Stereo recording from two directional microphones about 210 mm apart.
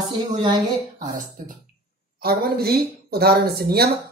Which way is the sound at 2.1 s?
45° right (ahead or behind).